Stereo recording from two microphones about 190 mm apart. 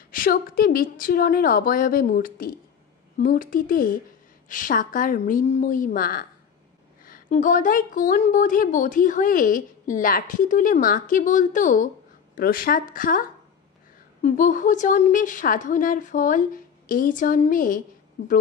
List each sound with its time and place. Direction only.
0.1 s speech: 50° left (ahead or behind)
14.2 s speech: 45° left (ahead or behind)
18.2 s a woman's voice: 70° left (ahead or behind)